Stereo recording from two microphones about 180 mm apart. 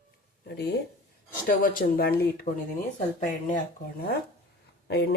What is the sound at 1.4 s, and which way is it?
Speech, 50° left (ahead or behind).